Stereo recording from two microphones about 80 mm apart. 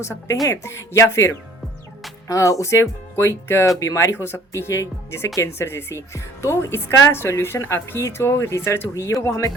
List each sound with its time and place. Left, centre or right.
0.0 s a woman's voice: left